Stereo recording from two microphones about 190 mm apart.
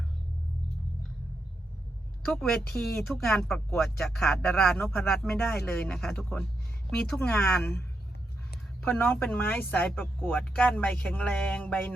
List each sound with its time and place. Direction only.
2.2 s speech: centre (ahead or behind)